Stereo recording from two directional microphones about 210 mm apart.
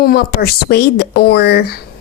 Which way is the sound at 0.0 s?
45° left (ahead or behind).